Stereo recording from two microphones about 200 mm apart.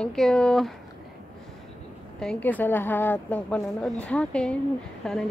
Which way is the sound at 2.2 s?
5° left (ahead or behind).